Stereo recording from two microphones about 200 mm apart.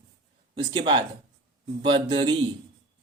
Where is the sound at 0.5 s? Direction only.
25° right (ahead or behind).